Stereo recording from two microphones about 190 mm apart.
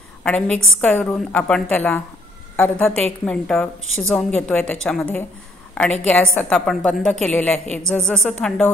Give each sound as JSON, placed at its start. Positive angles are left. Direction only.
{"t": 0.2, "sound": "a woman's voice", "side_deg": 5}